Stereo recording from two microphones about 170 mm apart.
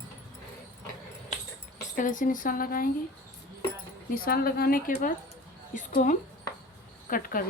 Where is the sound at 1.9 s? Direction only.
50° left (ahead or behind).